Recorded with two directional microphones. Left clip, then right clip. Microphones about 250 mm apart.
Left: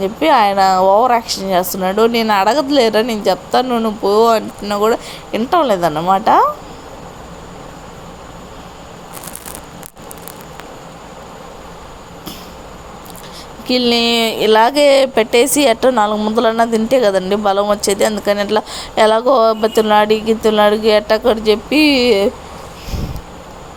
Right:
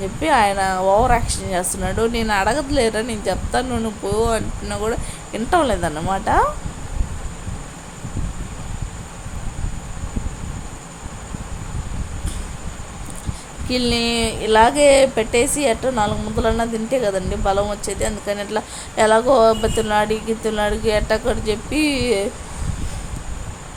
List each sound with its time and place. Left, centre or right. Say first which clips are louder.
0.0 s a woman's voice: left 5 dB; centre
13.7 s a woman's voice: left 7 dB; centre